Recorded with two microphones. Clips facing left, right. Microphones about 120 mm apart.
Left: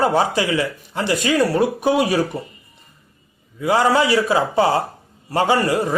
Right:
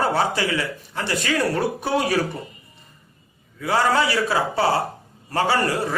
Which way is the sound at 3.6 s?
20° left (ahead or behind).